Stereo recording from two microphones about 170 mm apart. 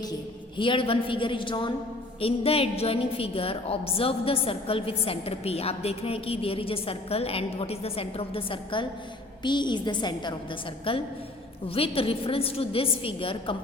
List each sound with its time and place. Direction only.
0.0 s a woman's voice: 25° left (ahead or behind)